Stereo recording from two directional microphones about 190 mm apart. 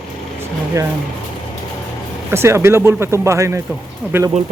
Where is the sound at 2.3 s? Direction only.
15° right (ahead or behind).